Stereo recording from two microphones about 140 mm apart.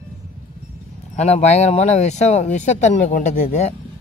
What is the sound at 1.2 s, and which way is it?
Speech, 50° left (ahead or behind).